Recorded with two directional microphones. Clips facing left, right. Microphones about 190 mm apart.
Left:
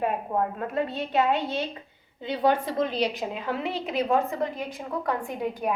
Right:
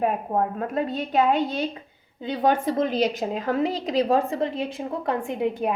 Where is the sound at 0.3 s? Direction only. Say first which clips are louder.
Right 2 dB; 40° right (ahead or behind).